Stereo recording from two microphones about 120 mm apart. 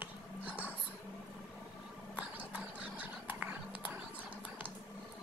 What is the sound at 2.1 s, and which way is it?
Whispering, 10° right (ahead or behind).